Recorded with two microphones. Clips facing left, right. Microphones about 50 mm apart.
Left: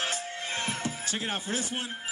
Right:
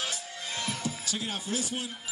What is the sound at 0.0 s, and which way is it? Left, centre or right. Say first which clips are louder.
Music: left 4 dB; left.